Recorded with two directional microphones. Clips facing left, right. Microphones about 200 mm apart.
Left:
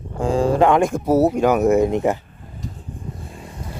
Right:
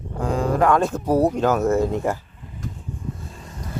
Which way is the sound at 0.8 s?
10° left (ahead or behind).